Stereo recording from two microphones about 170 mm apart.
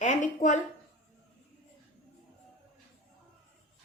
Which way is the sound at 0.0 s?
45° left (ahead or behind).